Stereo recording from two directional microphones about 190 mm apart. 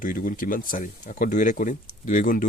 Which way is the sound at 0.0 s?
45° left (ahead or behind).